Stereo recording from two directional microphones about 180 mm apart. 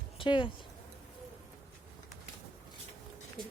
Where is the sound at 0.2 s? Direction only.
30° left (ahead or behind).